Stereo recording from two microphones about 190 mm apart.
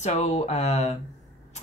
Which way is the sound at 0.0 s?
35° left (ahead or behind).